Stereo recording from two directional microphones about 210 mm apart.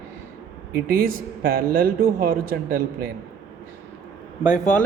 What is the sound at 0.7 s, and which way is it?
A man's voice, 45° right (ahead or behind).